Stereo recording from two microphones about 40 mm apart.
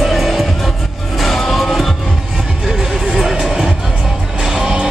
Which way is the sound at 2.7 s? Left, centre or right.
Centre.